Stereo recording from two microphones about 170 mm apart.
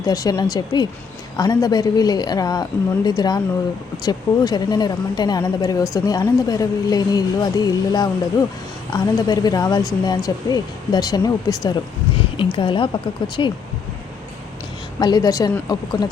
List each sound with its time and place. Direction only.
0.0 s speech: 20° left (ahead or behind)
14.9 s speech: 25° left (ahead or behind)